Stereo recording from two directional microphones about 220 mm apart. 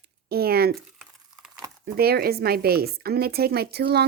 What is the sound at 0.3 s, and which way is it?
Speech, 45° right (ahead or behind).